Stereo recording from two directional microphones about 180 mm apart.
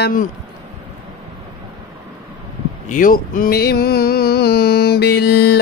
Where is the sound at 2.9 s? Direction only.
50° left (ahead or behind).